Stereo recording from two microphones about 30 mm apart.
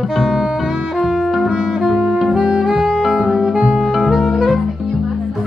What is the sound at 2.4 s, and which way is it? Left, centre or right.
Music, right.